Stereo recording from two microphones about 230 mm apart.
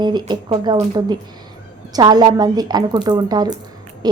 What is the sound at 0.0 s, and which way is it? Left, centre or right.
A woman's voice, centre.